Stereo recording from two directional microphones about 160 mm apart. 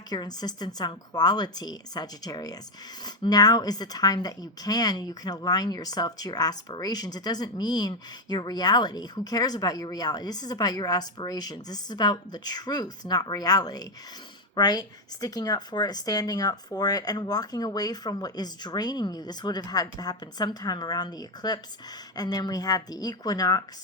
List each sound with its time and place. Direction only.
0.1 s speech: 25° left (ahead or behind)